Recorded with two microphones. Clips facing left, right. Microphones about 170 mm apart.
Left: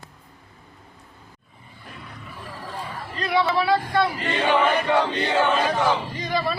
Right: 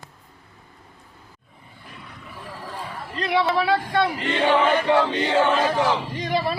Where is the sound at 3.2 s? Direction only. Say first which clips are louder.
Even; 20° right (ahead or behind).